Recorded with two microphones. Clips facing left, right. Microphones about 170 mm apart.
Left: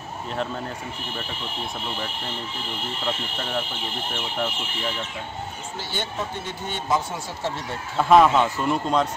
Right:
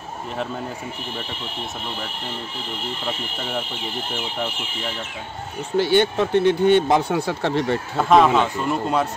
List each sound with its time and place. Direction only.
5.8 s speech: 70° right (ahead or behind)
8.0 s speech: centre (ahead or behind)